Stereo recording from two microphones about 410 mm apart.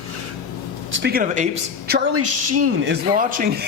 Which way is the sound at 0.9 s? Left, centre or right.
Right.